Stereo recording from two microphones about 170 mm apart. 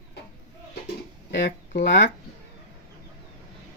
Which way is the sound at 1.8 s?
90° left.